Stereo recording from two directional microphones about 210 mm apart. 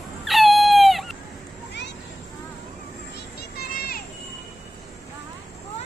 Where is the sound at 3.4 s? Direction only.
45° left (ahead or behind).